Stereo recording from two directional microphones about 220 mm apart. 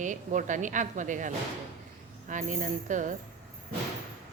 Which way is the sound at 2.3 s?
35° right (ahead or behind).